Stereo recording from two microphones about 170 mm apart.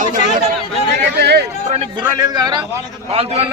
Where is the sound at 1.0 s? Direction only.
75° right (ahead or behind).